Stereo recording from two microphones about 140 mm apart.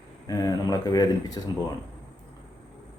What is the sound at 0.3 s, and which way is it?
Speech, 25° left (ahead or behind).